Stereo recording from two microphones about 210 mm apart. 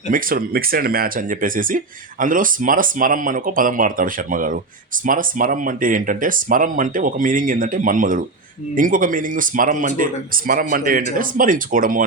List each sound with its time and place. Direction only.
0.1 s speech: 45° right (ahead or behind)